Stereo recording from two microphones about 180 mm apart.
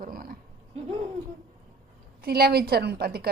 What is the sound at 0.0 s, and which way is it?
Roaring cats, 50° right (ahead or behind).